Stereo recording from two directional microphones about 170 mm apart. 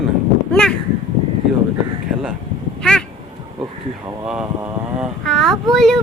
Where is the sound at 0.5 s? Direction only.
5° left (ahead or behind).